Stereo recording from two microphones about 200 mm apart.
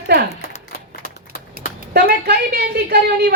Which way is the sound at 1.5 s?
50° right (ahead or behind).